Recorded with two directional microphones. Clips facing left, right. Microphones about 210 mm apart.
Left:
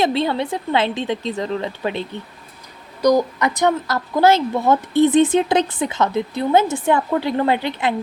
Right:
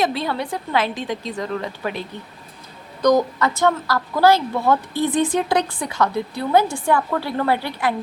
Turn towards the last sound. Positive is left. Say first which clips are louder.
# left 2 dB
turn(degrees=20)  # may be behind; listen again after turning